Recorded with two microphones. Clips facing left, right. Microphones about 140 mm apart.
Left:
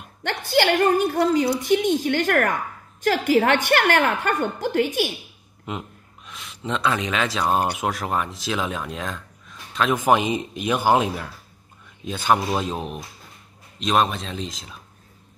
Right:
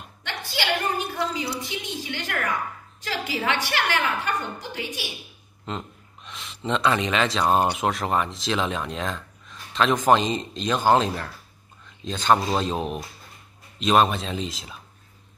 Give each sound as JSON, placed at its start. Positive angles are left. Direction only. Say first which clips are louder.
{"t": 0.2, "sound": "a woman's voice", "louder": "left 10 dB", "side_deg": 50}
{"t": 5.7, "sound": "a man's voice", "louder": "left 1 dB", "side_deg": 5}